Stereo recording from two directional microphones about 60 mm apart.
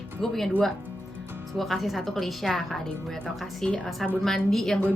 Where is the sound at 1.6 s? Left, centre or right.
Centre.